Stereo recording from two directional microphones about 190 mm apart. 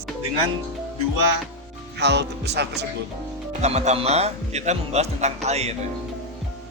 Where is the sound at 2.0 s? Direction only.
65° right (ahead or behind).